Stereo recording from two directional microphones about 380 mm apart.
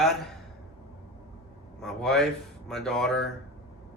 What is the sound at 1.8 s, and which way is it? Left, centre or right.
Speech, centre.